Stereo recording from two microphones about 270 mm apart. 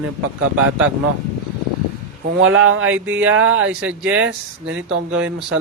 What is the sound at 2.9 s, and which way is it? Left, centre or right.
Speech, centre.